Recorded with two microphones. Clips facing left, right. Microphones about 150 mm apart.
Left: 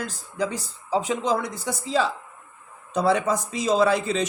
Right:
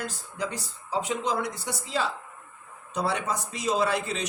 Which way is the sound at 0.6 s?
90° left.